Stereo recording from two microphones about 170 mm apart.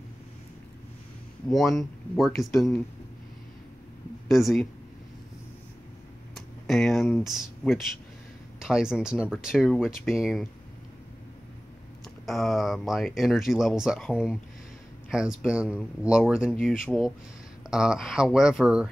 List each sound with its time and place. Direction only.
1.5 s speech: centre (ahead or behind)
4.3 s speech: centre (ahead or behind)
6.3 s a sound: centre (ahead or behind)
7.1 s speech: centre (ahead or behind)
12.3 s speech: centre (ahead or behind)